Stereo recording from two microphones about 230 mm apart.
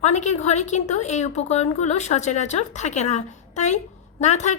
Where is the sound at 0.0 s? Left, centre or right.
Left.